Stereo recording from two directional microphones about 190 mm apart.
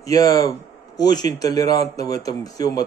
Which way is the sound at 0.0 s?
20° left (ahead or behind).